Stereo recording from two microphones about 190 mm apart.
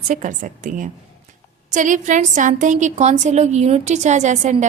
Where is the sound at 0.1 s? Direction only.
45° right (ahead or behind).